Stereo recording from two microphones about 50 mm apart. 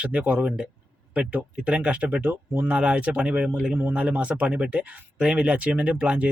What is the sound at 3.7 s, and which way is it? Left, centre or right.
Speech, right.